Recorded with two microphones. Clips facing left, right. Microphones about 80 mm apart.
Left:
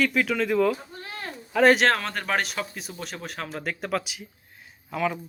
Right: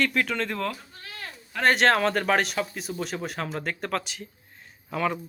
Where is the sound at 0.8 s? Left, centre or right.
Left.